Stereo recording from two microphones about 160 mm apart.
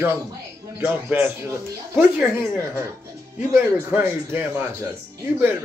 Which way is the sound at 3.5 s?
15° right (ahead or behind).